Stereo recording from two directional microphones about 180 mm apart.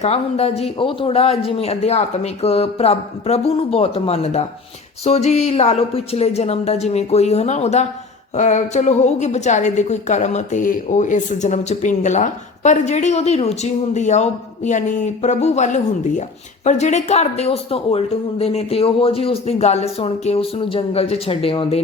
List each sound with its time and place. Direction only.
0.0 s a woman's voice: 35° left (ahead or behind)